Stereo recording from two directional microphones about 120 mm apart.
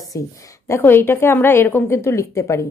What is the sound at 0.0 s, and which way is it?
A woman's voice, 30° left (ahead or behind).